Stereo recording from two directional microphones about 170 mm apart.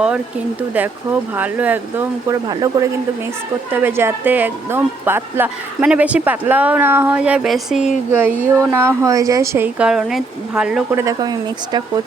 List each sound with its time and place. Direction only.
0.7 s speech: 10° right (ahead or behind)
2.5 s speech: 25° right (ahead or behind)
3.7 s speech: 10° right (ahead or behind)
11.0 s speech: 20° right (ahead or behind)